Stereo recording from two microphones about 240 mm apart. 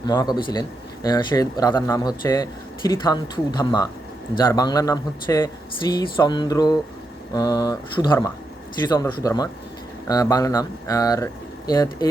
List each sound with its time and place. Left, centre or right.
0.0 s a man's voice: centre